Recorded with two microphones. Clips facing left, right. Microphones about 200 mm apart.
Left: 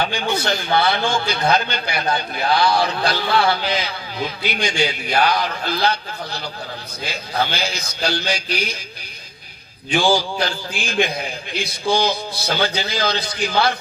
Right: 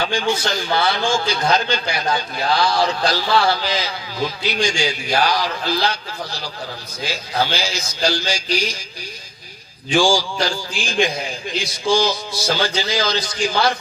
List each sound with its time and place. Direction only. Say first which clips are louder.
0.0 s a man's voice: right 1 dB; 60° left (ahead or behind)
10.0 s a man's voice: even; 60° left (ahead or behind)